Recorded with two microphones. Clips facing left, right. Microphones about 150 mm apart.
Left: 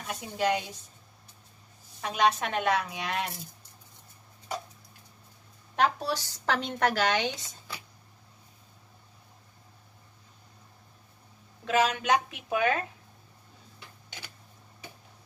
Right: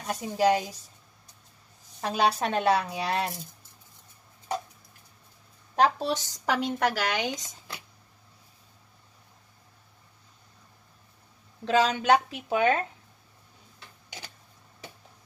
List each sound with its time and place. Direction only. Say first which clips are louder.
0.0 s a woman's voice: right 5 dB; 40° right (ahead or behind)
2.0 s a woman's voice: right 1 dB; 35° right (ahead or behind)
5.8 s speech: right 3 dB; 25° right (ahead or behind); by 7.3 s 10° right (ahead or behind)
11.6 s a woman's voice: right 3 dB; 30° right (ahead or behind)